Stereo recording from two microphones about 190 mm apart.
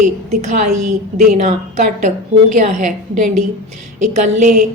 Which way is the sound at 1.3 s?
40° right (ahead or behind).